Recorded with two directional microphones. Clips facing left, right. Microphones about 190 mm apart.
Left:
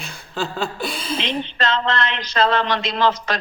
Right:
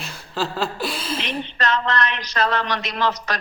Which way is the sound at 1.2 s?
25° left (ahead or behind).